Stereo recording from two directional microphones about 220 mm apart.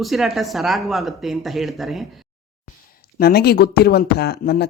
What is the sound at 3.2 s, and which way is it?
Speech, 45° left (ahead or behind).